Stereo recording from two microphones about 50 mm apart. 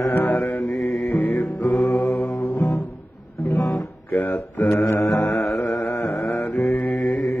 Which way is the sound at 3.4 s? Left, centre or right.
Left.